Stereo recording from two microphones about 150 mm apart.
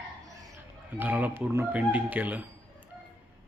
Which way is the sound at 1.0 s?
10° right (ahead or behind).